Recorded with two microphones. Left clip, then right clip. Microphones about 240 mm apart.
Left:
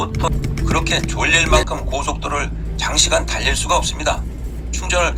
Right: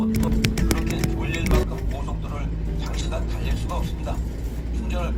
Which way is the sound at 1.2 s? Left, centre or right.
Left.